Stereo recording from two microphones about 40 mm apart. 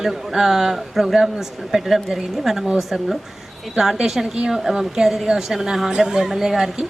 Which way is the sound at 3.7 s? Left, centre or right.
Centre.